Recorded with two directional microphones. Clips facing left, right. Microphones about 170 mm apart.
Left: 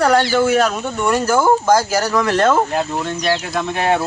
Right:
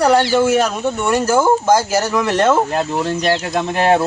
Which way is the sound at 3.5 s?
35° right (ahead or behind).